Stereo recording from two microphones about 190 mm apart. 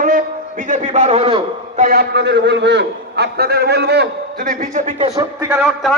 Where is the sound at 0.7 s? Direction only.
40° right (ahead or behind).